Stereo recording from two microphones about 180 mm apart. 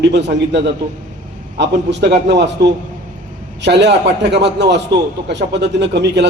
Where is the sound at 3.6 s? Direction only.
70° right (ahead or behind).